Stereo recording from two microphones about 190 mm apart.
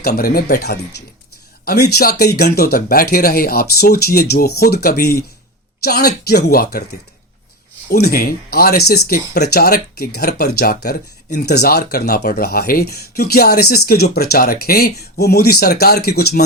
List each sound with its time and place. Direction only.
0.1 s speech: 50° left (ahead or behind)
7.9 s speech: 55° left (ahead or behind)